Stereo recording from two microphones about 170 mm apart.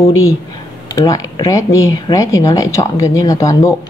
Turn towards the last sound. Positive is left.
turn(degrees=20)  # may be behind; listen again after turning